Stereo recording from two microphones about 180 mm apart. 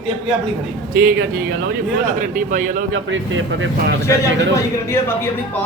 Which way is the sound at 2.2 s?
45° right (ahead or behind).